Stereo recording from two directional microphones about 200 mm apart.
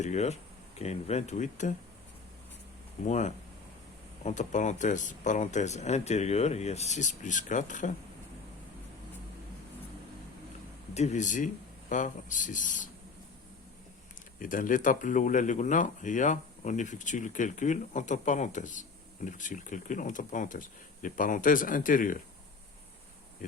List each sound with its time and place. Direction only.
0.0 s speech: 35° left (ahead or behind)
3.0 s speech: 35° left (ahead or behind)
10.9 s speech: 35° left (ahead or behind)
14.3 s speech: 40° left (ahead or behind)